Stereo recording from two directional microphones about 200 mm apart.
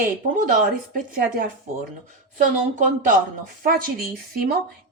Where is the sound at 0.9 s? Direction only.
45° right (ahead or behind).